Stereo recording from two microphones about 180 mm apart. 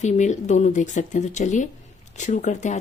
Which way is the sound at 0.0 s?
40° left (ahead or behind).